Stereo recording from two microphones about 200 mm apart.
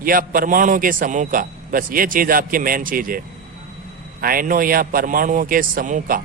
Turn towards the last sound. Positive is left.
turn(degrees=-40)  # may be behind; listen again after turning